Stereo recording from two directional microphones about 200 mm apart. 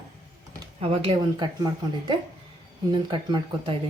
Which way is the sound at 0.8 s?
30° right (ahead or behind).